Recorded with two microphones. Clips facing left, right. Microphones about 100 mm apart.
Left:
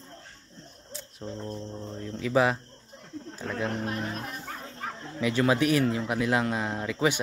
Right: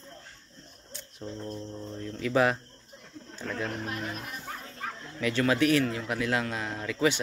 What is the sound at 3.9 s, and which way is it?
Speech, 35° left (ahead or behind).